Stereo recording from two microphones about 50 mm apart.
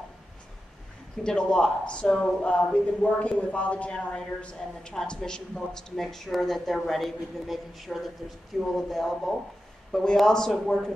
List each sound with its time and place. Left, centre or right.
1.2 s speech: centre